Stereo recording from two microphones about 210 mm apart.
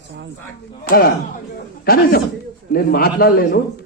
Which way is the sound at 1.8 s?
45° left (ahead or behind).